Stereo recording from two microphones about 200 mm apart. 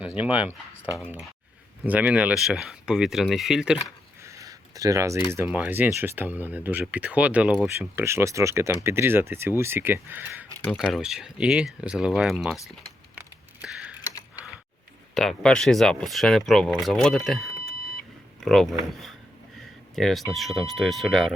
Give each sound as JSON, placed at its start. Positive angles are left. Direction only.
{"t": 0.0, "sound": "speech", "side_deg": -5}
{"t": 1.8, "sound": "speech", "side_deg": -5}
{"t": 4.2, "sound": "a sound", "side_deg": -15}
{"t": 5.3, "sound": "speech", "side_deg": -10}
{"t": 10.7, "sound": "speech", "side_deg": 5}
{"t": 13.6, "sound": "typing", "side_deg": -5}
{"t": 15.1, "sound": "speech", "side_deg": 0}